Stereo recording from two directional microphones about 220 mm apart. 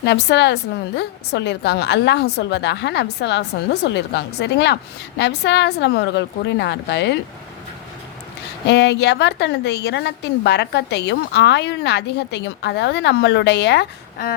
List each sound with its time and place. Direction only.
0.0 s a woman's voice: 50° left (ahead or behind)
8.6 s a woman's voice: 50° left (ahead or behind)